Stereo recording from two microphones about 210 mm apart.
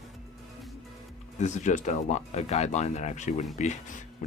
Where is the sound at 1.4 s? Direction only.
35° left (ahead or behind).